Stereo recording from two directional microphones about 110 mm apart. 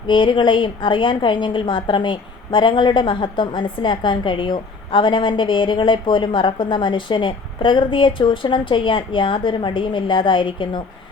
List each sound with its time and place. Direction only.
0.1 s a woman's voice: 50° left (ahead or behind)